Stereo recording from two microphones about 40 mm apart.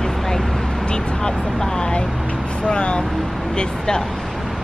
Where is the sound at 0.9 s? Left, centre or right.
Left.